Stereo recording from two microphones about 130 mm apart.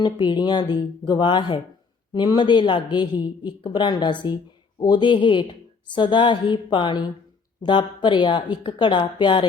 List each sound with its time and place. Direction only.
0.0 s a woman's voice: 35° left (ahead or behind)